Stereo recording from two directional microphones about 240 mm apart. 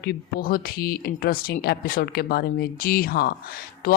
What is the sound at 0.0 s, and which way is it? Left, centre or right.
Speech, left.